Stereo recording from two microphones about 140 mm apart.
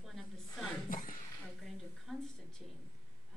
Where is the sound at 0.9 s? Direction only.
80° left.